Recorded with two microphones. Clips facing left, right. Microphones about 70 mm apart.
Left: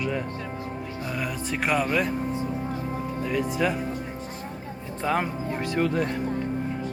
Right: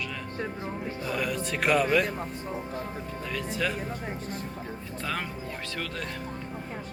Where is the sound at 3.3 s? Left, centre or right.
Centre.